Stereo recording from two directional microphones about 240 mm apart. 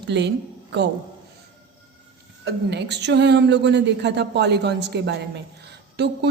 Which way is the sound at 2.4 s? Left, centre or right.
Right.